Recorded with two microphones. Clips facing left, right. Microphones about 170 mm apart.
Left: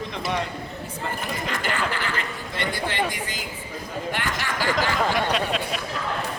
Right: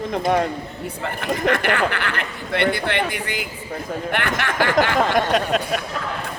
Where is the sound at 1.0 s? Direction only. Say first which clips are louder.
Right 9 dB; 65° right (ahead or behind).